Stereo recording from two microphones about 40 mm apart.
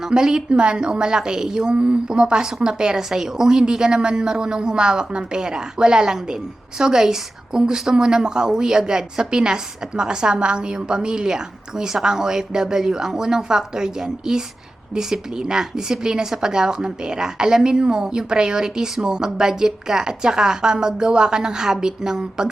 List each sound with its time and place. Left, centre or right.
0.0 s a woman's voice: centre